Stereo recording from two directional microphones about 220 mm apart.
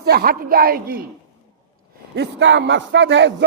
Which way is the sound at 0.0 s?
45° right (ahead or behind).